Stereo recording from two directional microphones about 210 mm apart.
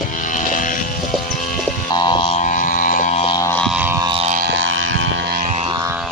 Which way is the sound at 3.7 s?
10° right (ahead or behind).